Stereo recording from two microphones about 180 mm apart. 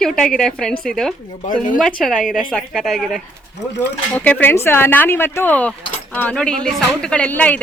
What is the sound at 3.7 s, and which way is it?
Speech, 75° left (ahead or behind).